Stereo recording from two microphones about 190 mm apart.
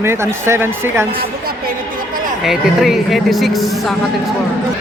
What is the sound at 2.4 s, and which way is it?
A man's voice, centre (ahead or behind).